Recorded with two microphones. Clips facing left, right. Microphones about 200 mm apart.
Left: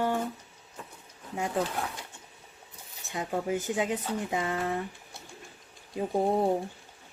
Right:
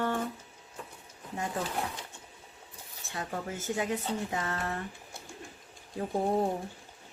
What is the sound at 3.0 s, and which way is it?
Speech, 15° left (ahead or behind).